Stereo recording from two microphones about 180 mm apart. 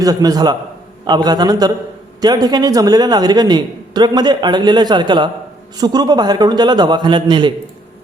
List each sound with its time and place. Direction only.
0.0 s speech: 20° right (ahead or behind)